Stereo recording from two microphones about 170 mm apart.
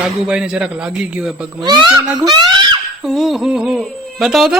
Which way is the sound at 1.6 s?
25° right (ahead or behind).